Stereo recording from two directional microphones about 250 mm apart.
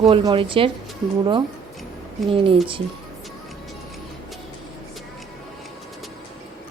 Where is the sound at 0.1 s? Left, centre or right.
Right.